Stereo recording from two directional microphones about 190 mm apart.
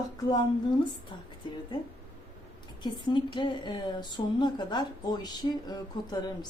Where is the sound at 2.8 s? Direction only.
25° left (ahead or behind).